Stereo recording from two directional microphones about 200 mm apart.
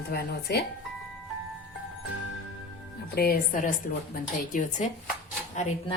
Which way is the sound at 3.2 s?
45° left (ahead or behind).